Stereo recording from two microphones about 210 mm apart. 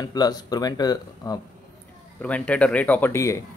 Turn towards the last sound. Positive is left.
turn(degrees=10)  # may be behind; listen again after turning